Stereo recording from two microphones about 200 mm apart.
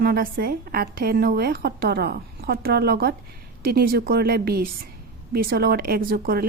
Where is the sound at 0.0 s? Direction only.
45° right (ahead or behind).